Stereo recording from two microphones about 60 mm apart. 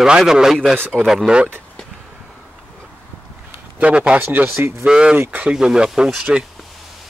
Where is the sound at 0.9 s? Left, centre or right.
Centre.